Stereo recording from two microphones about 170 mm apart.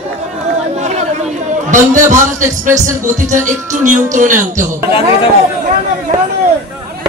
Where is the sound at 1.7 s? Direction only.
50° right (ahead or behind).